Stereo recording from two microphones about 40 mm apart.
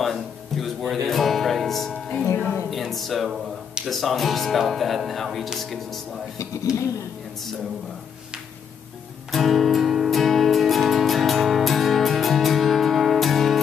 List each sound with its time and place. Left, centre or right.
0.0 s music: centre
3.8 s speech: centre
6.7 s speech: right
9.3 s music: centre